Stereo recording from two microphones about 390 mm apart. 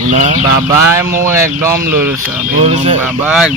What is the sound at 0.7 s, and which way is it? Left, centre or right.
Speech, centre.